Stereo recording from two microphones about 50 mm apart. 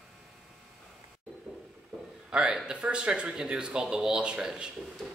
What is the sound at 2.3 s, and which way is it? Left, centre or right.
A man's voice, centre.